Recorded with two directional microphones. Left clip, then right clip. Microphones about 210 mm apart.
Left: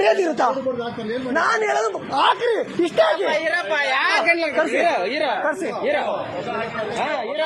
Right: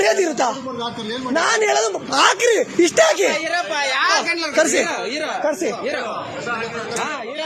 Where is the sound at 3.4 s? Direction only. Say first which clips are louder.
Even; 25° right (ahead or behind).